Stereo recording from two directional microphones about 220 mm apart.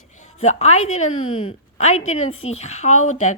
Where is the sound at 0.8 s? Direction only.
70° left (ahead or behind).